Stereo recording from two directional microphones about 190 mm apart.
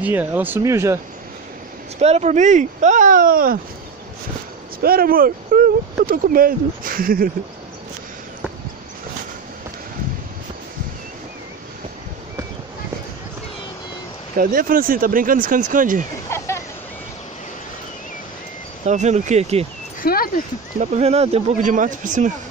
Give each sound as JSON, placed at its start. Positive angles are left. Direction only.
{"t": 0.0, "sound": "speech", "side_deg": -10}
{"t": 2.0, "sound": "speech", "side_deg": -35}
{"t": 4.7, "sound": "speech", "side_deg": -50}
{"t": 14.3, "sound": "speech", "side_deg": -45}
{"t": 16.3, "sound": "a sound", "side_deg": 15}
{"t": 18.9, "sound": "speech", "side_deg": -35}
{"t": 20.0, "sound": "speech", "side_deg": 50}
{"t": 20.8, "sound": "speech", "side_deg": -35}